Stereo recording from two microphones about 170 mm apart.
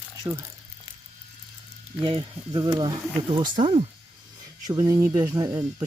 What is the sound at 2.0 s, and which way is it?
Speech, 25° right (ahead or behind).